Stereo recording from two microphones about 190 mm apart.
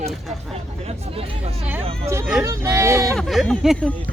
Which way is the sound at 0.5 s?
35° right (ahead or behind).